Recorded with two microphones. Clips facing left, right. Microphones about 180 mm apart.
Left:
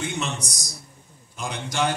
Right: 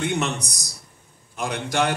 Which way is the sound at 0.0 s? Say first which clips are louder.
Right 4 dB; 65° right (ahead or behind).